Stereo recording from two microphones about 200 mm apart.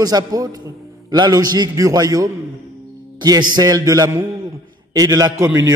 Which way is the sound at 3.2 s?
20° right (ahead or behind).